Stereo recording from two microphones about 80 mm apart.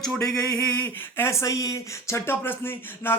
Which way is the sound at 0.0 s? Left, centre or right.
Centre.